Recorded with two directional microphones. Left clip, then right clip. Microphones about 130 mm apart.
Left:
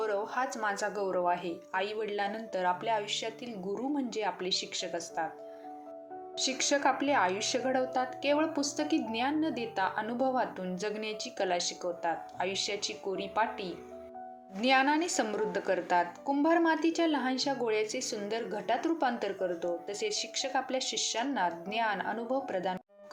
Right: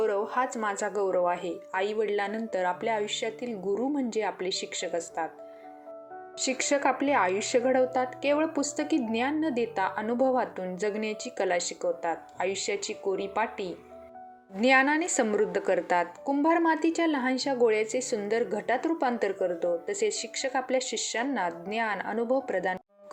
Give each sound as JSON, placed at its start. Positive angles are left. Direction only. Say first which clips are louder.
{"t": 0.0, "sound": "a woman's voice", "louder": "right 5 dB", "side_deg": -45}
{"t": 6.4, "sound": "a woman's voice", "louder": "right 2 dB", "side_deg": -45}